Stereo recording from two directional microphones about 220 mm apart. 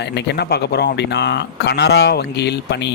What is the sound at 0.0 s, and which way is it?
Speech, 50° left (ahead or behind).